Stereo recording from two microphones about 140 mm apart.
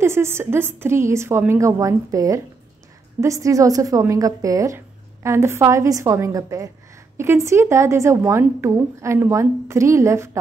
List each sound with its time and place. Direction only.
0.0 s a woman's voice: 20° right (ahead or behind)